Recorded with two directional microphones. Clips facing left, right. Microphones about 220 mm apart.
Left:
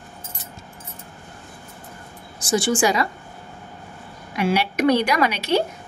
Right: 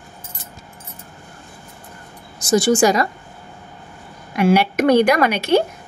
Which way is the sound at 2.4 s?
40° right (ahead or behind).